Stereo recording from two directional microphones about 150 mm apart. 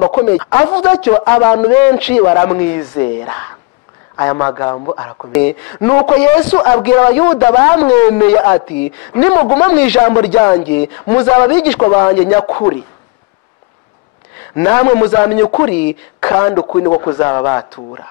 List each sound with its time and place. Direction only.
0.0 s speech: 20° left (ahead or behind)
4.6 s a man's voice: 30° left (ahead or behind)
5.4 s speech: 15° left (ahead or behind)
14.5 s speech: 15° left (ahead or behind)
16.5 s speech: 30° left (ahead or behind)